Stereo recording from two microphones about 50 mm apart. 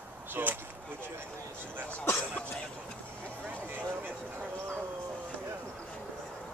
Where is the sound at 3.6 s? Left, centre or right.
Right.